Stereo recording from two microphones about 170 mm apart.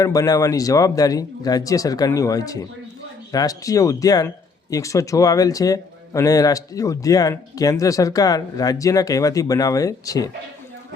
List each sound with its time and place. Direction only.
0.0 s speech: 20° left (ahead or behind)